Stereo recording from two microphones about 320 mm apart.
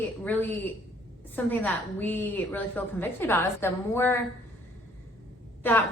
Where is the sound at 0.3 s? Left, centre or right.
Centre.